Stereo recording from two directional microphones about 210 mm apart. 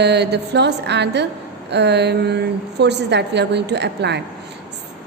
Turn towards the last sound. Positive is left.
turn(degrees=-55)  # may be behind; listen again after turning